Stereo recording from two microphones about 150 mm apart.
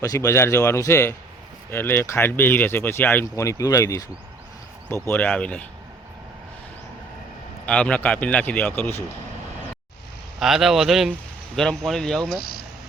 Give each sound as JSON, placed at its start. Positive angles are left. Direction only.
{"t": 0.0, "sound": "speech", "side_deg": 20}
{"t": 5.0, "sound": "speech", "side_deg": 10}
{"t": 7.6, "sound": "speech", "side_deg": 5}
{"t": 10.4, "sound": "speech", "side_deg": 0}